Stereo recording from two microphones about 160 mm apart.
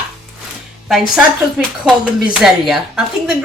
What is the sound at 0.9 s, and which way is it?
A woman's voice, 5° right (ahead or behind).